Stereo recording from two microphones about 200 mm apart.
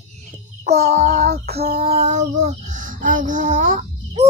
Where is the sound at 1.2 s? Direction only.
50° right (ahead or behind).